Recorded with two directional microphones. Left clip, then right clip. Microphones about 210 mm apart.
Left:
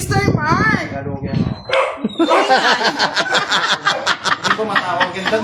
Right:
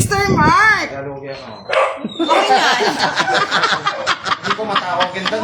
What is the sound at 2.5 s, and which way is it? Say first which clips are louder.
Speech: even; 45° left (ahead or behind).